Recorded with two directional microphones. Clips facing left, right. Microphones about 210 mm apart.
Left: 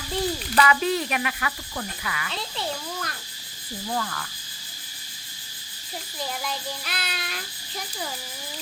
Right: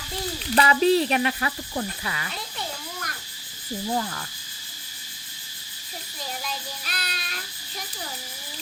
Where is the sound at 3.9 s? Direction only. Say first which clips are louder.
Even; 25° right (ahead or behind).